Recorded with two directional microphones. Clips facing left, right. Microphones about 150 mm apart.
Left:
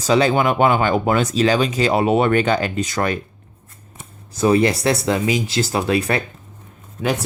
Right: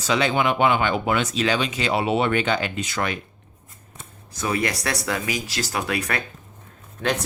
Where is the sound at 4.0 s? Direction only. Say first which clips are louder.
Left 10 dB; 30° left (ahead or behind).